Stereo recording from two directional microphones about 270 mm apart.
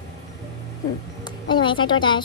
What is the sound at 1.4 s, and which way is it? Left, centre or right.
Speech, centre.